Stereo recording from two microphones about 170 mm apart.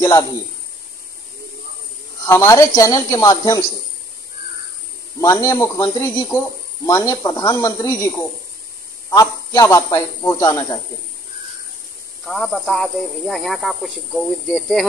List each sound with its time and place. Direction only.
0.0 s a sound: 20° left (ahead or behind)
2.2 s speech: 15° left (ahead or behind)
5.2 s speech: 20° left (ahead or behind)
12.3 s speech: centre (ahead or behind)